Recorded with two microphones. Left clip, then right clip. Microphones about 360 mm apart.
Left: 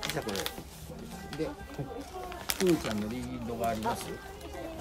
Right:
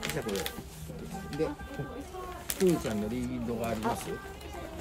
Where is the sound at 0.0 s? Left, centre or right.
Centre.